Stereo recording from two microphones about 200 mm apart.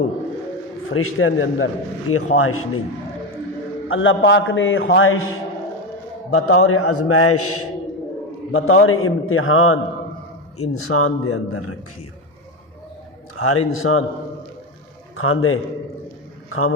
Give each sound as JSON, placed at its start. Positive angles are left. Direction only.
{"t": 0.9, "sound": "a man's voice", "side_deg": 90}
{"t": 3.8, "sound": "a man's voice", "side_deg": 80}
{"t": 6.3, "sound": "a man's voice", "side_deg": 90}
{"t": 8.5, "sound": "a man's voice", "side_deg": 90}
{"t": 13.3, "sound": "a man's voice", "side_deg": 90}
{"t": 15.1, "sound": "a man's voice", "side_deg": 90}